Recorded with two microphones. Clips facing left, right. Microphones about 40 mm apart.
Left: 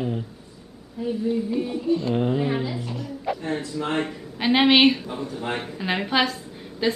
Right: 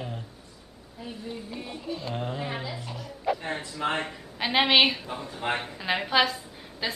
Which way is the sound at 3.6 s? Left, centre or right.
Right.